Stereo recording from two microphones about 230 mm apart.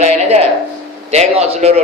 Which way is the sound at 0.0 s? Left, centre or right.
Right.